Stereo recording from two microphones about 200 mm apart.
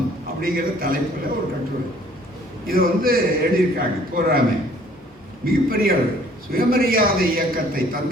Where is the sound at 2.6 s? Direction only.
45° right (ahead or behind).